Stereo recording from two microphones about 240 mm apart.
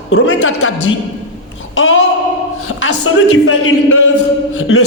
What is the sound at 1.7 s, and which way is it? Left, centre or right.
Speech, left.